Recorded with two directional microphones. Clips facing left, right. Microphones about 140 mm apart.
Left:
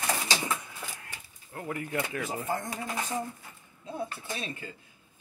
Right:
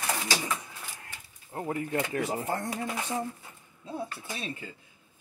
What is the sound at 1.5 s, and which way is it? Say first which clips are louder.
Speech: right 3 dB; 30° right (ahead or behind).